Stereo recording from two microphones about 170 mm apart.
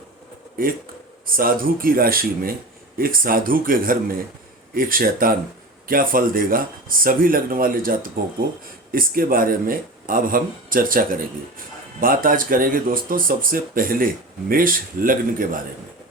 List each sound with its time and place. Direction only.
1.3 s speech: 55° right (ahead or behind)